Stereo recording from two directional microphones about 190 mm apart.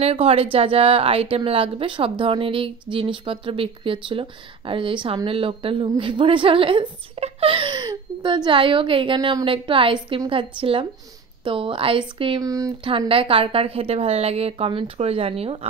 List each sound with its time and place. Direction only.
0.0 s a woman's voice: 30° right (ahead or behind)